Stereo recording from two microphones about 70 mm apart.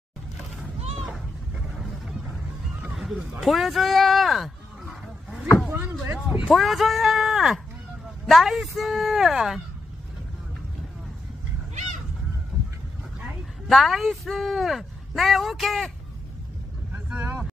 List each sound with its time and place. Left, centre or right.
3.0 s speech: centre
5.7 s a sound: right
6.5 s a woman's voice: centre
12.5 s honk: centre
13.3 s speech: centre
16.9 s vehicle: right